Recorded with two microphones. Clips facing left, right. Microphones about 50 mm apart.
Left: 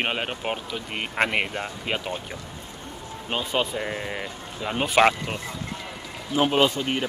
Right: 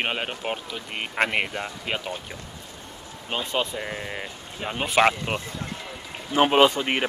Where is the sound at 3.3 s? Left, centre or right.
Centre.